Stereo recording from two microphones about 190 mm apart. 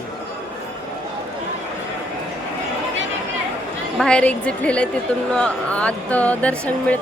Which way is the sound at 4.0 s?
5° left (ahead or behind).